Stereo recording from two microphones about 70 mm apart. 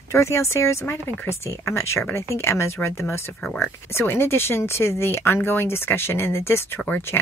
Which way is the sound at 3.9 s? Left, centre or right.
Left.